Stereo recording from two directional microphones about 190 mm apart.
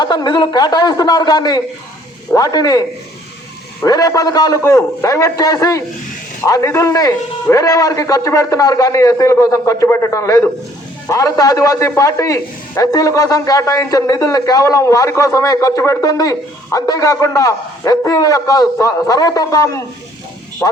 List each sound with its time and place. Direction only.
0.0 s a man's voice: 20° left (ahead or behind)
3.8 s a man's voice: 20° left (ahead or behind)